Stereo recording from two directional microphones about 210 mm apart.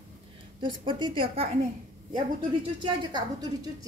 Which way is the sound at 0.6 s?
25° right (ahead or behind).